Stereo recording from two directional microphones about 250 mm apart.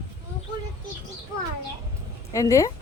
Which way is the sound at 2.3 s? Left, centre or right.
Centre.